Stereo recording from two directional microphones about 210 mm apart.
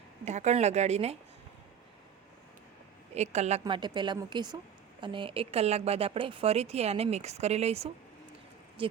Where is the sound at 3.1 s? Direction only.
30° right (ahead or behind).